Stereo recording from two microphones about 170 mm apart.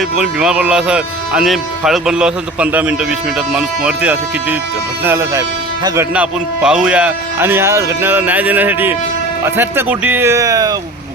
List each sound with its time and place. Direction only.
0.2 s speech: 5° right (ahead or behind)
6.1 s speech: 5° right (ahead or behind); by 10.8 s 20° right (ahead or behind)